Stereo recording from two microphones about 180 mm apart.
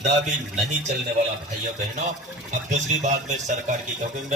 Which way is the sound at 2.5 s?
40° right (ahead or behind).